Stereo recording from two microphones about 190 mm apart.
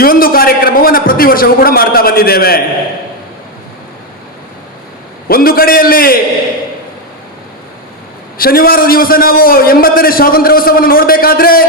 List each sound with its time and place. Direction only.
0.0 s a man's voice: 50° left (ahead or behind)
5.3 s a man's voice: 50° left (ahead or behind)
8.4 s a man's voice: 50° left (ahead or behind)